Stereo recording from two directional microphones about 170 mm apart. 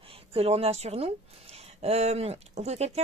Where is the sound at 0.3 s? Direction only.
35° right (ahead or behind).